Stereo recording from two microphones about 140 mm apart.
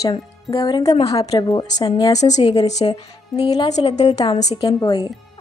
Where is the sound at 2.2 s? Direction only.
55° left (ahead or behind).